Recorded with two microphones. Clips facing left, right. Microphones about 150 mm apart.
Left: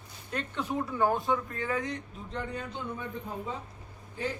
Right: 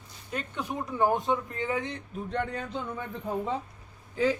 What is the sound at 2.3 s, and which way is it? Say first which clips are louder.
Speech: right 4 dB; 70° right (ahead or behind).